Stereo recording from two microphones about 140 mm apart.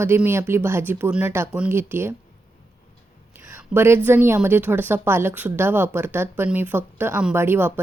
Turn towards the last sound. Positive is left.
turn(degrees=-15)  # may be behind; listen again after turning